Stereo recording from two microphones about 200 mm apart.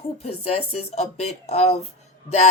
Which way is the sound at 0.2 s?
30° left (ahead or behind).